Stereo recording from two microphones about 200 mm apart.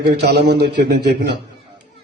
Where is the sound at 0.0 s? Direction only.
55° right (ahead or behind).